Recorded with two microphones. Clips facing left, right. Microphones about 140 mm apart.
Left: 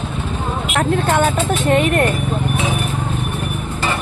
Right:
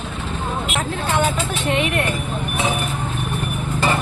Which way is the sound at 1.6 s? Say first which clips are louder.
Left 6 dB; 45° left (ahead or behind).